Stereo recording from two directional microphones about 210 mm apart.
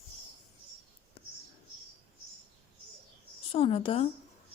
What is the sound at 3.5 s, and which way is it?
Speech, 25° left (ahead or behind).